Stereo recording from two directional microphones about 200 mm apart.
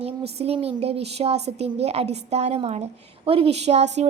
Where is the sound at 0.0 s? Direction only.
30° right (ahead or behind).